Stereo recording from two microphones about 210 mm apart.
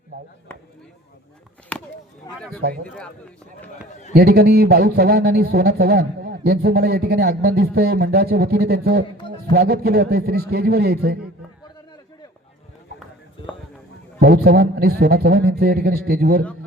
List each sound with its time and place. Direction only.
1.7 s chop: 5° left (ahead or behind)
2.3 s a man's voice: 15° left (ahead or behind)
2.8 s a man's voice: 5° left (ahead or behind)
4.1 s speech: 50° right (ahead or behind)
14.2 s speech: 50° right (ahead or behind)